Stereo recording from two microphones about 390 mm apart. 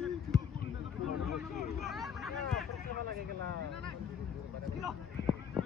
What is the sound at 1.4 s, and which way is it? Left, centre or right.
Vehicle, centre.